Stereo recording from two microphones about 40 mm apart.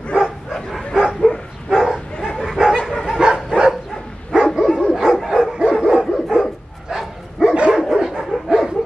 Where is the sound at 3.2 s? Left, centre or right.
Right.